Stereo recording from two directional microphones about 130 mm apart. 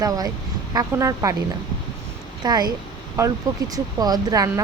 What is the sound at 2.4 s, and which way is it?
Speech, 30° right (ahead or behind).